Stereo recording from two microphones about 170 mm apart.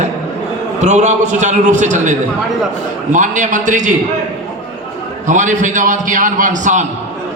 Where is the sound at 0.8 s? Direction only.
45° right (ahead or behind).